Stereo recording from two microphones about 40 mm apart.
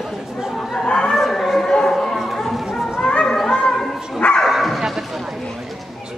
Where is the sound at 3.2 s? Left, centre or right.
Centre.